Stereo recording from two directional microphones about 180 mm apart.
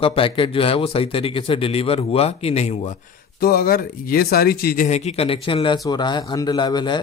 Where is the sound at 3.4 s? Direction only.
55° left (ahead or behind).